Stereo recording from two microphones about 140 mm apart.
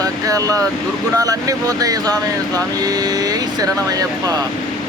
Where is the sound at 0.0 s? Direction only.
25° right (ahead or behind).